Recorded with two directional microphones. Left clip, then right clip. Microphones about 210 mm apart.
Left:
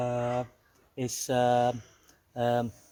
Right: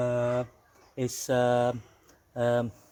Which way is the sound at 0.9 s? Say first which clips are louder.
Right 1 dB; 5° left (ahead or behind).